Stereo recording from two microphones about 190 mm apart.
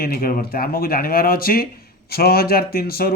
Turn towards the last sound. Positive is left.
turn(degrees=55)  # may be behind; listen again after turning